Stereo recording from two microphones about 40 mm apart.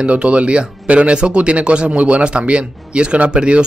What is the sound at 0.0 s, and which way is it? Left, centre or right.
Speech, right.